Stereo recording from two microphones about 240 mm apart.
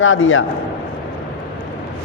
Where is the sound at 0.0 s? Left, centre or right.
Left.